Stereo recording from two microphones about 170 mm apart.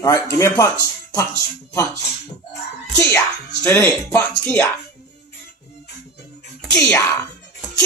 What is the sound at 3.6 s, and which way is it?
Speech, 10° left (ahead or behind).